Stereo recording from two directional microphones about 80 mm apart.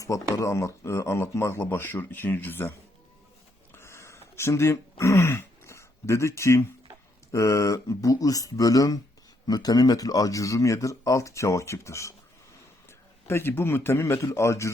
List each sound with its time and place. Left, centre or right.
0.0 s speech: left
3.7 s throat clearing: left
7.3 s speech: left
13.2 s speech: left